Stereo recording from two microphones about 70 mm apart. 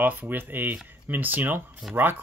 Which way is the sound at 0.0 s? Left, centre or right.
Right.